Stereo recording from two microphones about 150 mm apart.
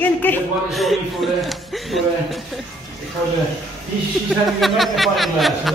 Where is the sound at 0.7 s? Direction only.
Centre (ahead or behind).